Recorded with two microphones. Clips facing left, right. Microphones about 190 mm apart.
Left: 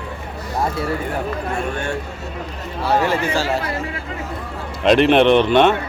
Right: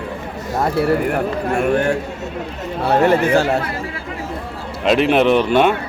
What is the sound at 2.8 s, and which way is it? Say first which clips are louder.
Speech: right 5 dB; 55° right (ahead or behind).